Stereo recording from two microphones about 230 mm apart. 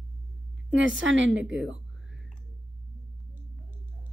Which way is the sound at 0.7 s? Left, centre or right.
Right.